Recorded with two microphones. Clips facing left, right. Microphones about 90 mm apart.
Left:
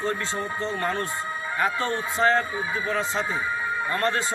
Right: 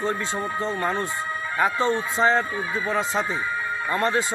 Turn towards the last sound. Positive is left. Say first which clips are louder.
# right 2 dB
turn(degrees=-20)  # may be behind; listen again after turning